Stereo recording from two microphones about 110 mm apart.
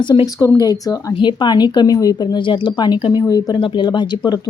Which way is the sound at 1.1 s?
45° left (ahead or behind).